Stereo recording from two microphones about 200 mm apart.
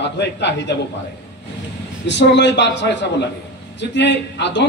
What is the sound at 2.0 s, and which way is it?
A man's voice, 60° left (ahead or behind).